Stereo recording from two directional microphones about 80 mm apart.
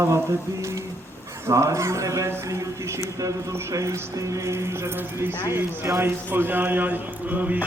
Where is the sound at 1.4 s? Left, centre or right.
Right.